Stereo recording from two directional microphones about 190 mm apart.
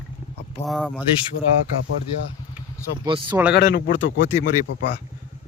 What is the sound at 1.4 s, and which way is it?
Speech, 55° left (ahead or behind).